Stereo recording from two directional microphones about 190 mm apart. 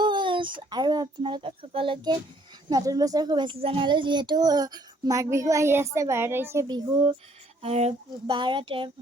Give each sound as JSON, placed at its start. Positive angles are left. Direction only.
{"t": 0.0, "sound": "a child's voice", "side_deg": -25}